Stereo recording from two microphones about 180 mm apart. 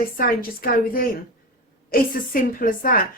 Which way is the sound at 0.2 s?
55° left (ahead or behind).